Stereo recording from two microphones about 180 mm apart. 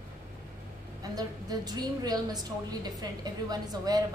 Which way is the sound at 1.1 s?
20° right (ahead or behind).